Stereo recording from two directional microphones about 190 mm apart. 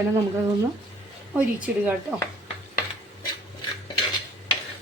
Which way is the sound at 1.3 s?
5° right (ahead or behind).